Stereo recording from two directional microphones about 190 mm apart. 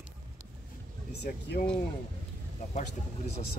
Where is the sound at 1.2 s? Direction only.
60° left (ahead or behind).